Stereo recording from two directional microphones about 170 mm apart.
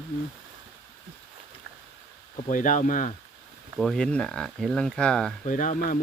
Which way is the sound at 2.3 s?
50° left (ahead or behind).